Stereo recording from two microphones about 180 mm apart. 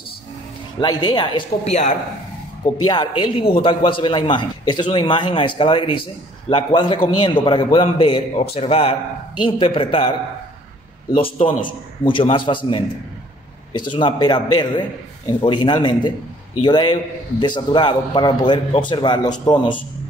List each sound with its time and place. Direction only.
0.7 s a man's voice: 25° left (ahead or behind)
2.6 s a man's voice: 25° left (ahead or behind)